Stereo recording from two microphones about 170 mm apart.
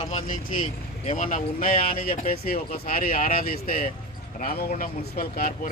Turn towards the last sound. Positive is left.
turn(degrees=60)  # may be behind; listen again after turning